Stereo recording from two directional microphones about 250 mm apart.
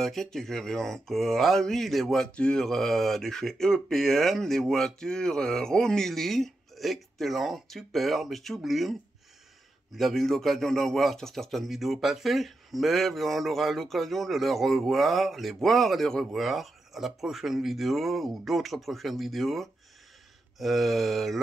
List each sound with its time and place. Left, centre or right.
0.0 s speech: centre
9.9 s speech: centre